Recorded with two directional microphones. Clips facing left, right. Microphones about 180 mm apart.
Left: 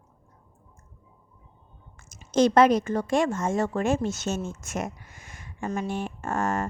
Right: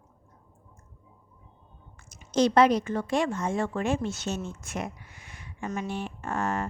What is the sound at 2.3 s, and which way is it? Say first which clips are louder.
Speech: left 2 dB; 50° left (ahead or behind).